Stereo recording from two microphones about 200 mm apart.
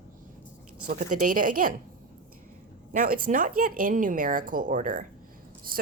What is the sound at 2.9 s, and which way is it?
Speech, 45° right (ahead or behind).